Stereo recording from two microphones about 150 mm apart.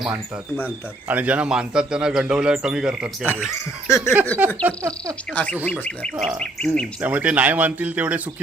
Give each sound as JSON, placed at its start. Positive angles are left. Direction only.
{"t": 1.0, "sound": "a man's voice", "side_deg": -10}
{"t": 3.5, "sound": "speech", "side_deg": 20}
{"t": 4.4, "sound": "speech", "side_deg": -10}
{"t": 5.3, "sound": "a man's voice", "side_deg": 10}
{"t": 7.0, "sound": "speech", "side_deg": -10}